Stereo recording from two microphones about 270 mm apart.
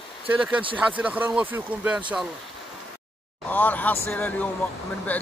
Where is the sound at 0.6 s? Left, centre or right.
Centre.